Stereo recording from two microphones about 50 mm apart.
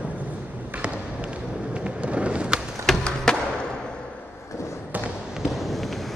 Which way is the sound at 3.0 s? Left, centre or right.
Centre.